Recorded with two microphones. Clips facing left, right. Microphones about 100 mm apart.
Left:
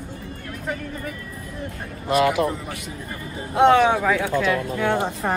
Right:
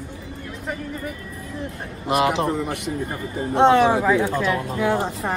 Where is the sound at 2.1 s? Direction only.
25° right (ahead or behind).